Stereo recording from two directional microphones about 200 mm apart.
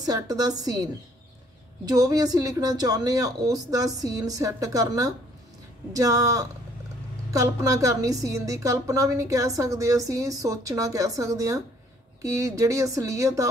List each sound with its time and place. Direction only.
0.0 s a woman's voice: 20° right (ahead or behind)
1.9 s a woman's voice: 20° right (ahead or behind)